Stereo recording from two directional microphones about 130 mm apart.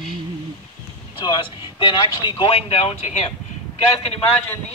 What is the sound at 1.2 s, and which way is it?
Speech, 40° left (ahead or behind).